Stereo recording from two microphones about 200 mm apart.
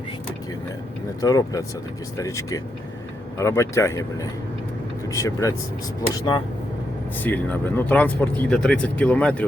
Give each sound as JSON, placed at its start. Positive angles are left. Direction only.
{"t": 1.2, "sound": "speech", "side_deg": 20}
{"t": 7.2, "sound": "speech", "side_deg": 10}